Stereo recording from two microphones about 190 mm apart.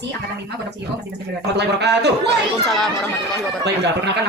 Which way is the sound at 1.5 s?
60° right (ahead or behind).